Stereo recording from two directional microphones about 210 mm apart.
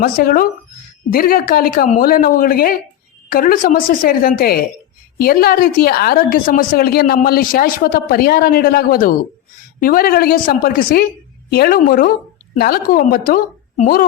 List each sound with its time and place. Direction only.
0.0 s a woman's voice: 45° left (ahead or behind)